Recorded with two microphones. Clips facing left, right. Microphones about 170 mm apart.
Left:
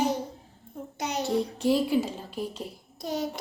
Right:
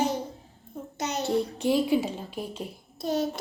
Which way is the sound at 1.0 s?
15° left (ahead or behind).